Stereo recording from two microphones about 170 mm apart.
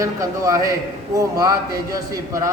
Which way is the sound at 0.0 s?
20° right (ahead or behind).